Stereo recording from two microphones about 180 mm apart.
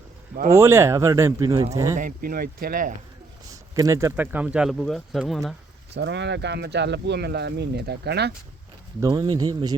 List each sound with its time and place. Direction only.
0.5 s speech: 15° right (ahead or behind)
2.0 s speech: 50° right (ahead or behind)
3.8 s speech: 15° right (ahead or behind); by 5.5 s centre (ahead or behind)
5.9 s speech: 75° right (ahead or behind)
9.0 s speech: 20° right (ahead or behind)